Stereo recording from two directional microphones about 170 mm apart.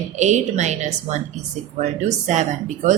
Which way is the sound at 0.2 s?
45° right (ahead or behind).